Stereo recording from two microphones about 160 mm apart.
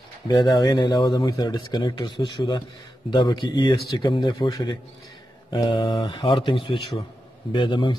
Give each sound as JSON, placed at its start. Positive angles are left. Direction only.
{"t": 0.3, "sound": "speech", "side_deg": 25}